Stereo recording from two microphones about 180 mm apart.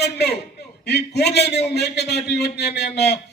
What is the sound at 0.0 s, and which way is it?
A man's voice, 65° left (ahead or behind).